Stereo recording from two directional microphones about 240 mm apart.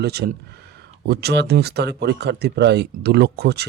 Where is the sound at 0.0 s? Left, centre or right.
Right.